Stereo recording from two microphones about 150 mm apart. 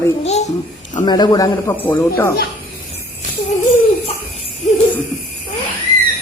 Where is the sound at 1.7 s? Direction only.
10° left (ahead or behind).